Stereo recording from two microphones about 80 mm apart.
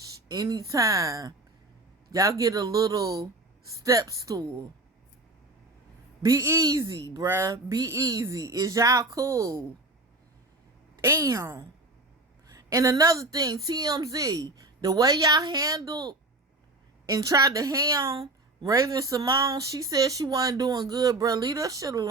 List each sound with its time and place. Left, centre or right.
0.1 s a woman's voice: right
6.2 s a woman's voice: right
11.0 s a woman's voice: right